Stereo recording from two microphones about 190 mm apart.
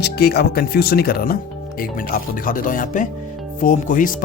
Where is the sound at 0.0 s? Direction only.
55° left (ahead or behind).